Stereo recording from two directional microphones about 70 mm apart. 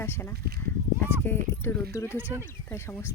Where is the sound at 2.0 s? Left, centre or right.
Right.